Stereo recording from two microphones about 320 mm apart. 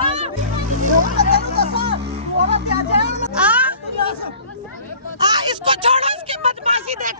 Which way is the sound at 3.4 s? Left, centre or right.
Centre.